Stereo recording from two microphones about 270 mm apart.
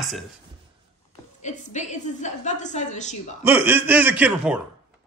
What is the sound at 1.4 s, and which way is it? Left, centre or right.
A woman's voice, left.